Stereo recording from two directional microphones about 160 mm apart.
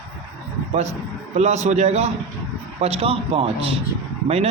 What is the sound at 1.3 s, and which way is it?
A man's voice, 45° right (ahead or behind).